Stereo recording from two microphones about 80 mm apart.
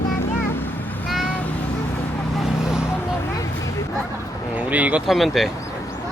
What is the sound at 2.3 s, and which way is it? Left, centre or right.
Vehicle, centre.